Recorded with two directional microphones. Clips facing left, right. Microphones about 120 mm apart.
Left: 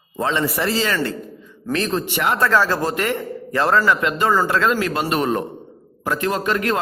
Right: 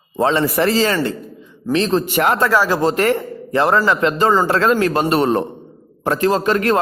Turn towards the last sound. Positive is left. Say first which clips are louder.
# right 5 dB
turn(degrees=-30)  # may be behind; listen again after turning